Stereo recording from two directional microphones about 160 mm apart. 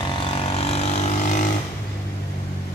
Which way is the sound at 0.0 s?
35° left (ahead or behind).